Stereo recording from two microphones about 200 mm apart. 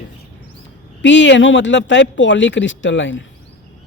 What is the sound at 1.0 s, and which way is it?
Speech, 65° left (ahead or behind).